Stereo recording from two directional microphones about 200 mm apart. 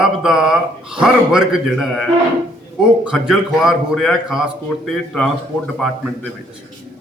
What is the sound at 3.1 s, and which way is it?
Speech, centre (ahead or behind).